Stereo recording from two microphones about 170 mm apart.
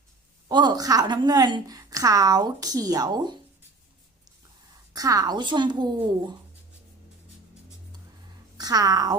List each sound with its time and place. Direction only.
0.4 s a woman's voice: 25° right (ahead or behind)
4.9 s a woman's voice: 20° right (ahead or behind)
8.5 s a woman's voice: 25° right (ahead or behind)